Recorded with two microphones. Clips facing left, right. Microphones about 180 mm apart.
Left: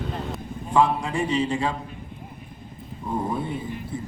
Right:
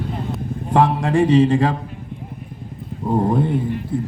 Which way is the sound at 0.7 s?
55° right (ahead or behind).